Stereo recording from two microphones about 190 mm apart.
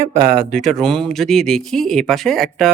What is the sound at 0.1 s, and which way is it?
Speech, 50° right (ahead or behind).